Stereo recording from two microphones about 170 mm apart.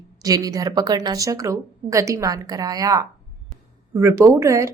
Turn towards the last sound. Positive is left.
turn(degrees=-15)  # may be behind; listen again after turning